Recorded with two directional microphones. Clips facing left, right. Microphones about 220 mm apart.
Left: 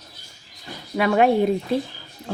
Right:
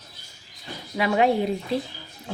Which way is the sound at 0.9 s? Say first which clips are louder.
Left 3 dB; 55° left (ahead or behind).